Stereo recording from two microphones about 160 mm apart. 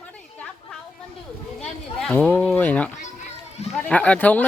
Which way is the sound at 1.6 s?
5° left (ahead or behind).